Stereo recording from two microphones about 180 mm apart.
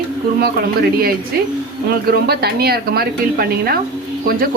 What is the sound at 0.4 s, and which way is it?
A woman's voice, 60° right (ahead or behind).